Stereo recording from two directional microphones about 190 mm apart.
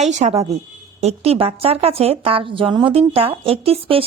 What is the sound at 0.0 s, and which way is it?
Speech, 35° right (ahead or behind).